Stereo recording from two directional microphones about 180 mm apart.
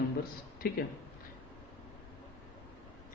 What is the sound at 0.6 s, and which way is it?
Speech, 55° left (ahead or behind).